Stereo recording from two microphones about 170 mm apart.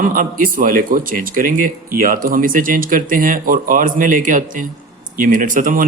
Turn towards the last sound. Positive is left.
turn(degrees=-50)  # may be behind; listen again after turning